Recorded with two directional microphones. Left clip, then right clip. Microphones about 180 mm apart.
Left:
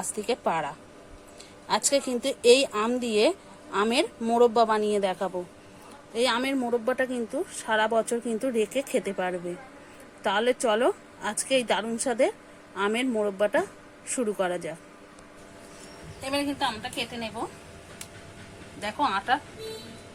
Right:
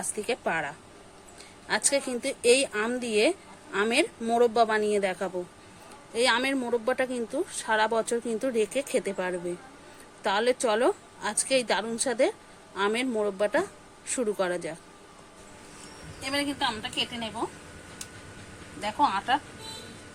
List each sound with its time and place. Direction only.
0.2 s a woman's voice: 5° left (ahead or behind)
16.2 s a woman's voice: 15° left (ahead or behind)
18.8 s speech: 25° left (ahead or behind)